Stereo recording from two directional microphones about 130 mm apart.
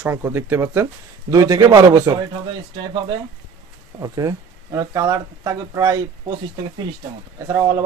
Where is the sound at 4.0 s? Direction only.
25° right (ahead or behind).